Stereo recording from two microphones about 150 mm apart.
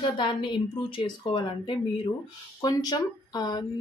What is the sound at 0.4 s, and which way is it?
Speech, 35° left (ahead or behind).